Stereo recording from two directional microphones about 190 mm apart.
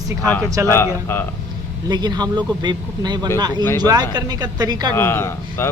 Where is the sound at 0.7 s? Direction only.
10° left (ahead or behind).